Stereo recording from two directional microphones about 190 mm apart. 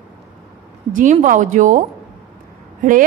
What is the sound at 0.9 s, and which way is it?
Speech, 40° right (ahead or behind).